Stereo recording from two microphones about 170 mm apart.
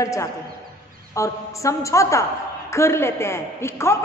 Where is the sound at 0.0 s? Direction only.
20° left (ahead or behind).